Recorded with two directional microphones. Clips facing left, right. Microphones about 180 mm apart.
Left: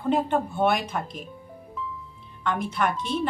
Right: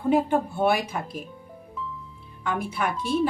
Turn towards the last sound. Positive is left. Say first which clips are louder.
# right 1 dB
turn(degrees=-10)  # may be behind; listen again after turning